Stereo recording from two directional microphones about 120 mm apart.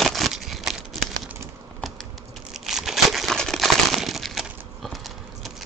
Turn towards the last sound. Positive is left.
turn(degrees=0)  # may be behind; listen again after turning